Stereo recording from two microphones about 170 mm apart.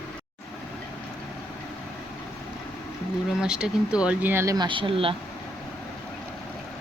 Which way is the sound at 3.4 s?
5° right (ahead or behind).